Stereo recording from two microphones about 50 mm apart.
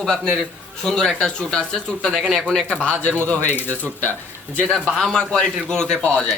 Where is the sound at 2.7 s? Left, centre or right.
Left.